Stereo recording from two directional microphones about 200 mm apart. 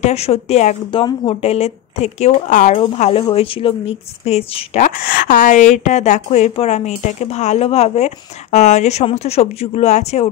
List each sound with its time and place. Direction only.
0.0 s speech: 30° left (ahead or behind)
4.8 s speech: 45° left (ahead or behind)